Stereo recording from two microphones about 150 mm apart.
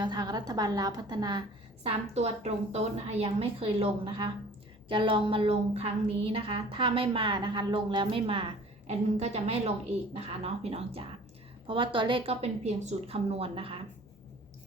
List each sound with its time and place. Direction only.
0.0 s a woman's voice: 30° right (ahead or behind)
1.9 s a woman's voice: 45° right (ahead or behind)
8.9 s a woman's voice: 45° right (ahead or behind)